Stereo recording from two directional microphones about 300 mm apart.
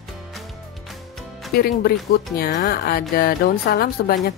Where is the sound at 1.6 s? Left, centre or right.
Left.